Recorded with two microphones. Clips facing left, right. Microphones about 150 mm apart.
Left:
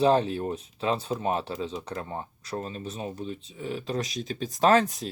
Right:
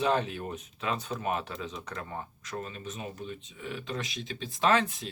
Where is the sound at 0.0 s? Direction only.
30° left (ahead or behind).